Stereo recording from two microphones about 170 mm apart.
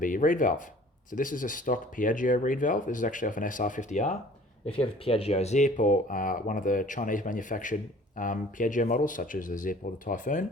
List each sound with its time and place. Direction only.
0.0 s speech: 50° left (ahead or behind)
4.6 s speech: 35° left (ahead or behind)